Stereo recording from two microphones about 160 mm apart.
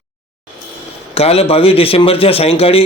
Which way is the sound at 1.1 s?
40° left (ahead or behind).